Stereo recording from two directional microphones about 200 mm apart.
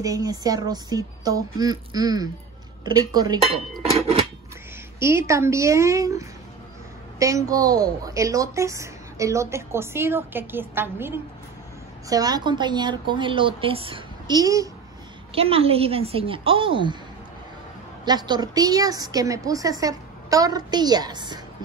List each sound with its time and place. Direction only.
0.0 s a woman's voice: 20° right (ahead or behind)
3.4 s dishes: centre (ahead or behind)
5.0 s a woman's voice: 15° right (ahead or behind)
15.3 s a woman's voice: 30° right (ahead or behind)
18.0 s a woman's voice: 20° right (ahead or behind)